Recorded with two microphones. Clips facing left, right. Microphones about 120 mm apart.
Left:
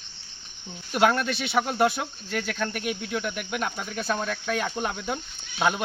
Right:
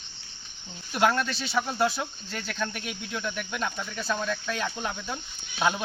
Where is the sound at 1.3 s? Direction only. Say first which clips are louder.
Left 4 dB; 60° left (ahead or behind).